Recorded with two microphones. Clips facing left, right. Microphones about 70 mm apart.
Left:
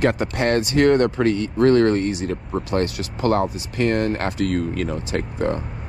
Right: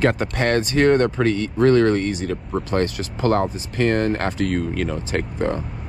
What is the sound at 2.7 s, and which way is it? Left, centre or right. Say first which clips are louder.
Speech: even; right.